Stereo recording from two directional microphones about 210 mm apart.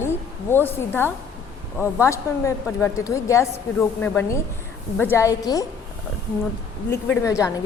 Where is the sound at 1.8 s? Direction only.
15° left (ahead or behind).